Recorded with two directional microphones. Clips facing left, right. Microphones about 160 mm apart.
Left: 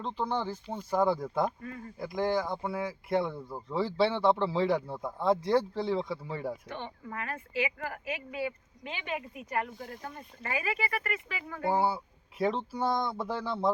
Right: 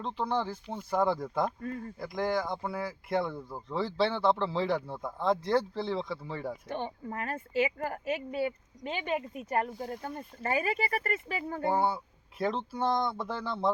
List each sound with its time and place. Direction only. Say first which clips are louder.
0.0 s speech: right 1 dB; centre (ahead or behind)
6.7 s speech: right 4 dB; 40° right (ahead or behind)
11.7 s speech: left 2 dB; 10° left (ahead or behind)